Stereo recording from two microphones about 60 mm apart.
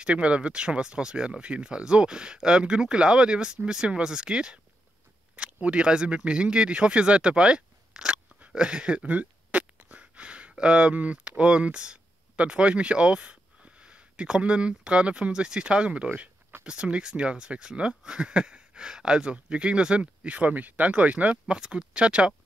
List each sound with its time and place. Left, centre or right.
0.0 s speech: centre
8.4 s a sound: centre
10.5 s speech: centre